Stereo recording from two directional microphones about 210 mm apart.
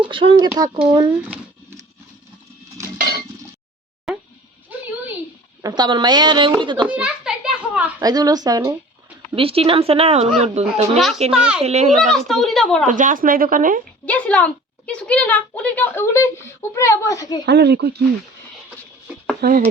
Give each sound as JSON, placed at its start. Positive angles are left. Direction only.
{"t": 0.0, "sound": "speech", "side_deg": -25}
{"t": 4.1, "sound": "goat", "side_deg": 0}
{"t": 4.7, "sound": "a sound", "side_deg": -5}
{"t": 5.6, "sound": "speech", "side_deg": -20}
{"t": 6.8, "sound": "children playing", "side_deg": -5}
{"t": 8.0, "sound": "speech", "side_deg": -20}
{"t": 10.9, "sound": "a child's voice", "side_deg": 0}
{"t": 11.6, "sound": "speech", "side_deg": -30}
{"t": 11.9, "sound": "a child's voice", "side_deg": 0}
{"t": 12.9, "sound": "speech", "side_deg": -40}
{"t": 14.0, "sound": "speech", "side_deg": 5}
{"t": 17.4, "sound": "speech", "side_deg": -50}
{"t": 19.4, "sound": "speech", "side_deg": -40}